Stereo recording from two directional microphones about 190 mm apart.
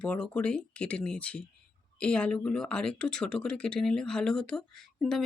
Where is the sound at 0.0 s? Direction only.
5° left (ahead or behind).